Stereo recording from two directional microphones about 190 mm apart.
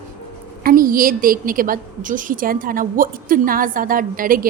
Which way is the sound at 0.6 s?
50° right (ahead or behind).